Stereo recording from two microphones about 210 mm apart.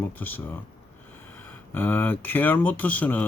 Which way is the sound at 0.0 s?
10° left (ahead or behind).